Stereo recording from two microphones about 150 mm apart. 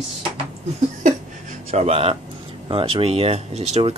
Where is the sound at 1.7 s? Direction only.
45° right (ahead or behind).